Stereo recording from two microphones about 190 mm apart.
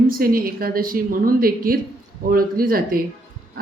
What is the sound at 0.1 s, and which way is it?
A woman's voice, 50° right (ahead or behind).